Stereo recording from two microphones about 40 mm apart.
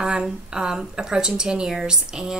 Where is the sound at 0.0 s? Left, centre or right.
Right.